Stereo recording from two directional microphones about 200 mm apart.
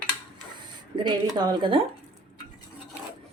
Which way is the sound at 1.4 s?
25° right (ahead or behind).